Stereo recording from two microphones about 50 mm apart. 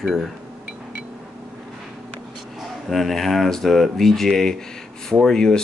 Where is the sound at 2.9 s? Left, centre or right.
Centre.